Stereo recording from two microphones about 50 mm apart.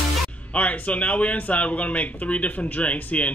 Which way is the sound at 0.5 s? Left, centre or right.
Left.